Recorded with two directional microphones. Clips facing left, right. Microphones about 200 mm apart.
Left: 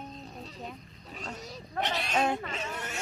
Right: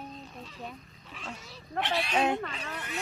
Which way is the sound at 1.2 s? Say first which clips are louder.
Left 3 dB; 40° left (ahead or behind).